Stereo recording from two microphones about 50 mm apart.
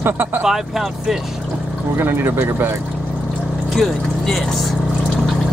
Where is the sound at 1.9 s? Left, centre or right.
Right.